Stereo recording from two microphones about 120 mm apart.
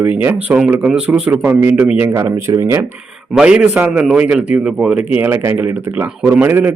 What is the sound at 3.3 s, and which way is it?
A man's voice, 10° right (ahead or behind).